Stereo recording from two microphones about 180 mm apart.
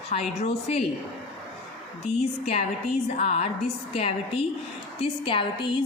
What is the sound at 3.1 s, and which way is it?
A woman's voice, 35° left (ahead or behind).